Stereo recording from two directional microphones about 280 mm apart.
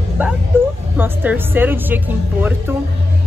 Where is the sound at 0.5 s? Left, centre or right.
Centre.